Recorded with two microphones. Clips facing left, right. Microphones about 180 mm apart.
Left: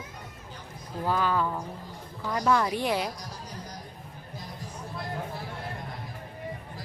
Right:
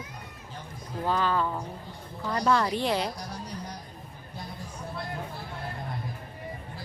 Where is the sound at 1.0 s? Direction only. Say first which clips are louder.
Even; 10° left (ahead or behind).